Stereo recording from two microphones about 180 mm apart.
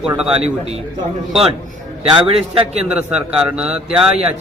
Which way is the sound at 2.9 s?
5° right (ahead or behind).